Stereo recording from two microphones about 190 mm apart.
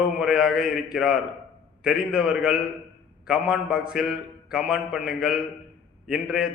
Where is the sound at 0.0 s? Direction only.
5° right (ahead or behind).